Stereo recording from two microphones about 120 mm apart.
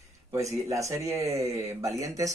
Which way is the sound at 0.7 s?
25° right (ahead or behind).